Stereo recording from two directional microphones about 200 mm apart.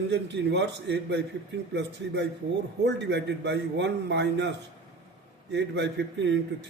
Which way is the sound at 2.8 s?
60° right (ahead or behind).